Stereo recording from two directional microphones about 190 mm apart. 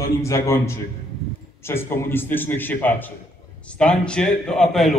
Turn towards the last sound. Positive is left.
turn(degrees=0)  # may be behind; listen again after turning